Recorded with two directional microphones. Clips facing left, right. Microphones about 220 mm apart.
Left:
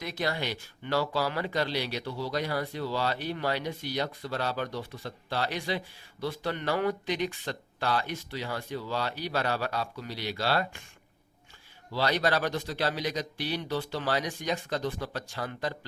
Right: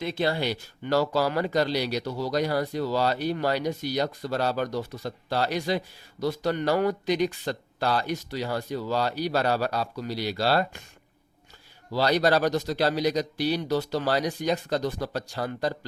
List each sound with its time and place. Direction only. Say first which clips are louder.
0.0 s speech: right 6 dB; 30° right (ahead or behind)
11.9 s speech: right 5 dB; 40° right (ahead or behind)